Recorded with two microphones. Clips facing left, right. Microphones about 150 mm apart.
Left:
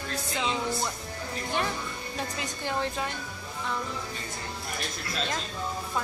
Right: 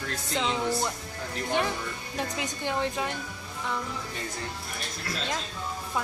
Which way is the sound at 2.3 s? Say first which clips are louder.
Right 1 dB; 15° right (ahead or behind).